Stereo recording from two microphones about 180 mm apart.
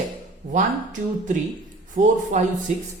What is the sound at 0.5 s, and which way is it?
Speech, 45° right (ahead or behind).